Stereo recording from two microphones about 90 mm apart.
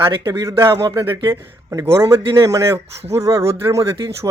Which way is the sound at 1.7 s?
35° right (ahead or behind).